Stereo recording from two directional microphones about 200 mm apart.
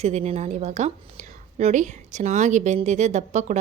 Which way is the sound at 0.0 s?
30° right (ahead or behind).